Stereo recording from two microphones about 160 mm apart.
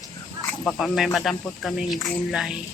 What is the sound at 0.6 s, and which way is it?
A woman's voice, centre (ahead or behind).